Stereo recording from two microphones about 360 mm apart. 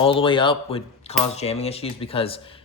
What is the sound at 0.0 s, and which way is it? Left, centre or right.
Speech, centre.